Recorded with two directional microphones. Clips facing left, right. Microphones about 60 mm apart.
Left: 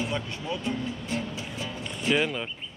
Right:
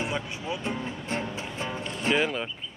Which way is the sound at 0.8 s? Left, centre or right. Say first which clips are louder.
Even; right.